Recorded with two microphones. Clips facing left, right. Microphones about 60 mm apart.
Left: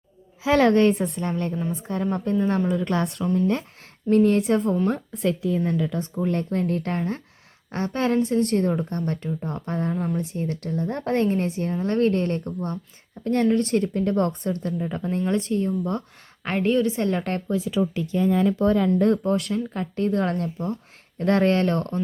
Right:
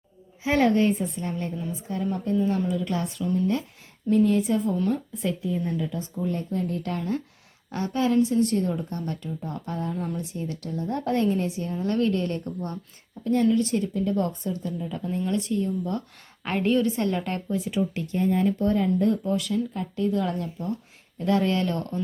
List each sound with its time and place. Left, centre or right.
0.5 s a woman's voice: left
2.9 s a woman's voice: left
3.2 s a woman's voice: left
4.1 s a woman's voice: left
5.1 s a woman's voice: left
6.9 s a woman's voice: left
7.7 s a woman's voice: left
13.2 s a woman's voice: left
16.4 s a woman's voice: centre
17.0 s speech: left
18.9 s a woman's voice: left